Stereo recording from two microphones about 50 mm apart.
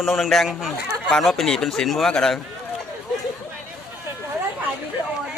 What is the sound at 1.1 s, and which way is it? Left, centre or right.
Speech, centre.